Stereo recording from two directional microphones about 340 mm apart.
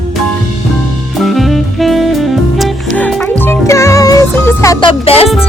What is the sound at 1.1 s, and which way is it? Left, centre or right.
Music, centre.